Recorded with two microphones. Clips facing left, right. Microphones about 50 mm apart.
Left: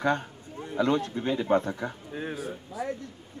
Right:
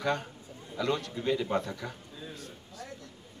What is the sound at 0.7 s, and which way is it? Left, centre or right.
Speech, left.